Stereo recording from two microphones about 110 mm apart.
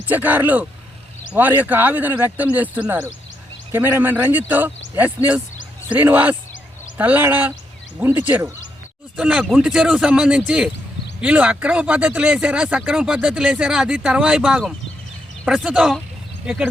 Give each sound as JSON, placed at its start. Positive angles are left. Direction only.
{"t": 0.1, "sound": "speech", "side_deg": -15}